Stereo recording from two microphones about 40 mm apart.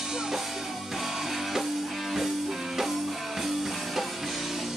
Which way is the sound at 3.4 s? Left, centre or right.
Centre.